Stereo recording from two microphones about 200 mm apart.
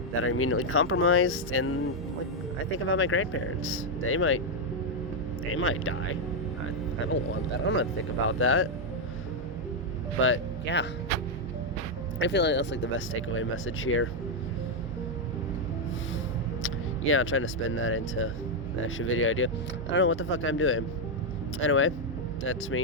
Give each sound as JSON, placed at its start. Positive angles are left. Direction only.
{"t": 0.2, "sound": "speech", "side_deg": 90}
{"t": 5.5, "sound": "speech", "side_deg": 90}
{"t": 7.1, "sound": "speech", "side_deg": 70}
{"t": 8.3, "sound": "speech", "side_deg": 90}
{"t": 10.2, "sound": "speech", "side_deg": 70}
{"t": 12.2, "sound": "speech", "side_deg": 60}
{"t": 16.6, "sound": "speech", "side_deg": 90}